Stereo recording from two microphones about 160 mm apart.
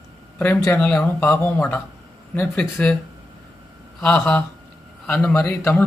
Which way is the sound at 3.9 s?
5° left (ahead or behind).